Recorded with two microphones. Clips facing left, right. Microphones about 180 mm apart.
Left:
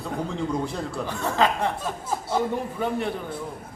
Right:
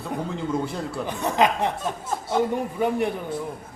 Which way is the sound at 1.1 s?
15° right (ahead or behind).